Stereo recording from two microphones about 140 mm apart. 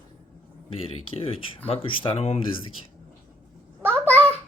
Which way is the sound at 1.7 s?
40° left (ahead or behind).